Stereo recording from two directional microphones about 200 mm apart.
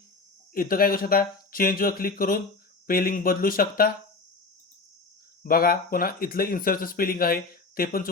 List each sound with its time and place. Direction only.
0.5 s speech: 45° left (ahead or behind)
5.4 s speech: 45° left (ahead or behind)